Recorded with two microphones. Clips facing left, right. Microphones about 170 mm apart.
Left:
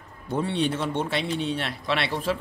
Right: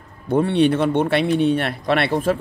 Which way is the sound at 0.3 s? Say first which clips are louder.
Right 9 dB; 60° right (ahead or behind).